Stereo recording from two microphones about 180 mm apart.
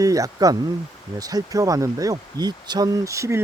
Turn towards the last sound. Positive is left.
turn(degrees=-15)  # may be behind; listen again after turning